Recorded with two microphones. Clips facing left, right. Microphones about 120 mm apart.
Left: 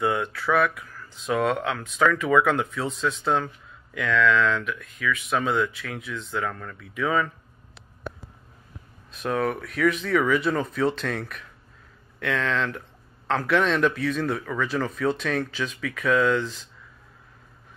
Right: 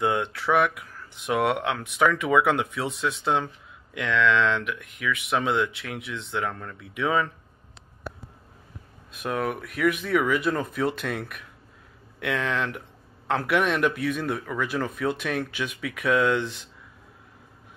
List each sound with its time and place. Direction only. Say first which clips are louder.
0.0 s speech: even; 20° right (ahead or behind)
9.1 s speech: left 2 dB; 10° right (ahead or behind)